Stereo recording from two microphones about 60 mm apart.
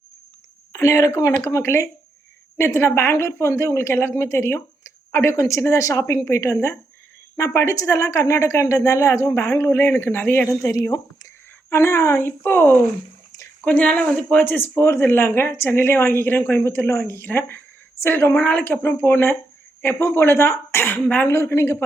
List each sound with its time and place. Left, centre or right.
0.7 s a woman's voice: left
2.6 s a woman's voice: left
10.6 s speech: left
12.4 s speech: left
13.7 s speech: left
21.2 s speech: left